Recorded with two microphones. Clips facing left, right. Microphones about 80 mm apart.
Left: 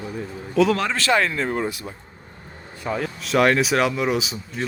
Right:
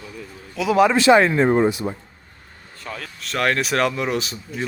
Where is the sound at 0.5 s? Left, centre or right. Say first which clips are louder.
Right 3 dB; centre; by 1.4 s right.